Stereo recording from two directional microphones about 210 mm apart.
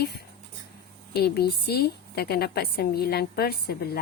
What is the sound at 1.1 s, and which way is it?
Speech, 50° left (ahead or behind).